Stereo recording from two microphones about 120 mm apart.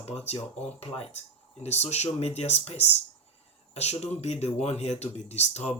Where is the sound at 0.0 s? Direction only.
60° left (ahead or behind).